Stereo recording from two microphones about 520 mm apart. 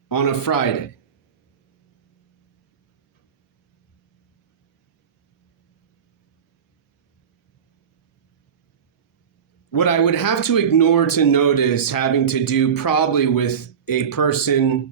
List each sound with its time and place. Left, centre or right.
0.1 s speech: left
9.7 s speech: left